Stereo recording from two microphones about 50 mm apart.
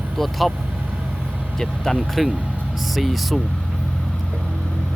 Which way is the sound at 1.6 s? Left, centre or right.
Centre.